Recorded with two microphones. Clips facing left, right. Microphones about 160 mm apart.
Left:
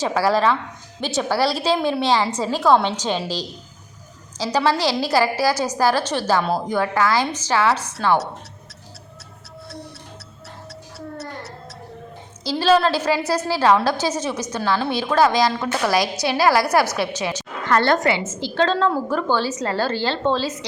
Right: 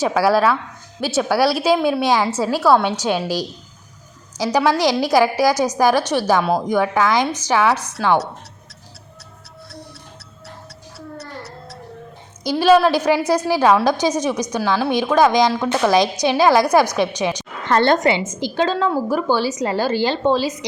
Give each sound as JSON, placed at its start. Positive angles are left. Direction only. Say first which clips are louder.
{"t": 0.0, "sound": "a woman's voice", "louder": "right 3 dB", "side_deg": -10}
{"t": 10.9, "sound": "music", "louder": "left 1 dB", "side_deg": 0}
{"t": 12.4, "sound": "a woman's voice", "louder": "right 4 dB", "side_deg": -15}